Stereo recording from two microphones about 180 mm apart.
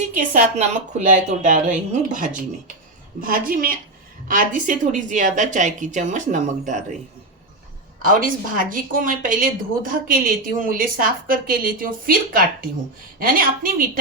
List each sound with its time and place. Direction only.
0.1 s speech: 45° right (ahead or behind)
8.0 s speech: 50° right (ahead or behind)